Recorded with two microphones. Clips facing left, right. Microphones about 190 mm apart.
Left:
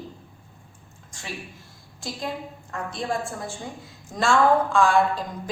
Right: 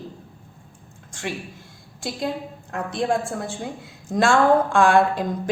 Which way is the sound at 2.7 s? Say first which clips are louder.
Right 6 dB; 70° right (ahead or behind).